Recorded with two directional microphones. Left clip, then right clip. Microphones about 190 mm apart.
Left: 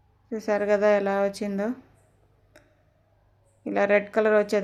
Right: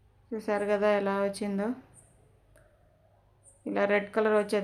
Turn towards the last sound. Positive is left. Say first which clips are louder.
# left 5 dB
turn(degrees=20)  # may be behind; listen again after turning